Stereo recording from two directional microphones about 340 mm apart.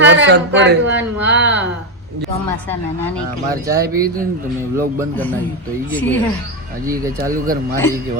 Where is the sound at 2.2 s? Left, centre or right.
Centre.